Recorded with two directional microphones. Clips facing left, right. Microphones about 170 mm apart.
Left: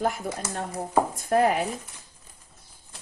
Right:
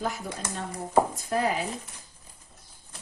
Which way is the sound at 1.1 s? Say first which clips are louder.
Left 5 dB; 55° left (ahead or behind).